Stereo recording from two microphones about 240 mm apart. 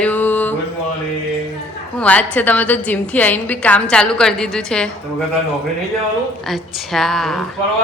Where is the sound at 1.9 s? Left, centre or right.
Centre.